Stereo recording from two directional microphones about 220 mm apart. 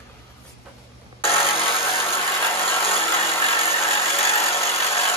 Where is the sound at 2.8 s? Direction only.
25° left (ahead or behind).